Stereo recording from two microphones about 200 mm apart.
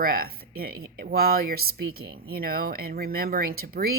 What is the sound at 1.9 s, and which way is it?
Speech, 90° right.